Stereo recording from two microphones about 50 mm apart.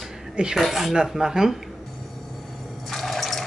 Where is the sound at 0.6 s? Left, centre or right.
Centre.